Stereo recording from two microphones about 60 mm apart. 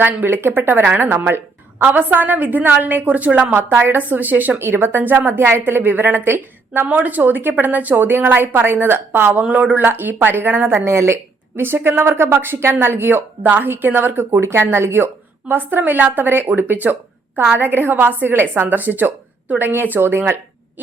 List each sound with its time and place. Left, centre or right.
0.0 s a woman's voice: right
3.5 s a woman's voice: right
3.9 s a woman's voice: right
6.8 s a woman's voice: right